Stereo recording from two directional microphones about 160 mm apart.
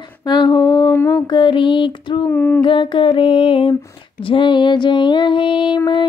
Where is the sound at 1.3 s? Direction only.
30° left (ahead or behind).